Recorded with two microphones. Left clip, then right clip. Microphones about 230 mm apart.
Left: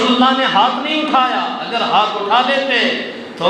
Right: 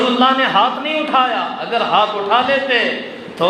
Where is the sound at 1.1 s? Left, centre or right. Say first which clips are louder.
Even; right.